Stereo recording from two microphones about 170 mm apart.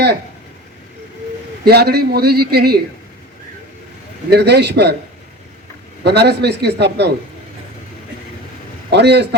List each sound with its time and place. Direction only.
1.6 s a man's voice: 70° right (ahead or behind)
4.3 s a man's voice: 75° right (ahead or behind)
6.0 s a man's voice: 75° right (ahead or behind)
8.9 s a man's voice: 80° right